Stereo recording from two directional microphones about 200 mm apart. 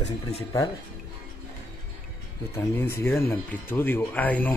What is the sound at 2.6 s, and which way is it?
Speech, 10° left (ahead or behind).